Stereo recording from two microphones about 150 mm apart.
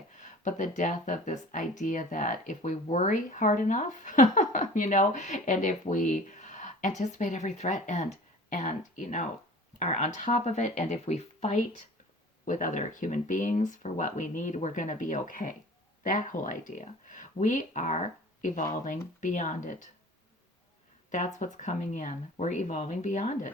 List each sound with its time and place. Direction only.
0.2 s speech: 60° left (ahead or behind)
12.5 s speech: 60° left (ahead or behind)
21.1 s speech: 55° left (ahead or behind)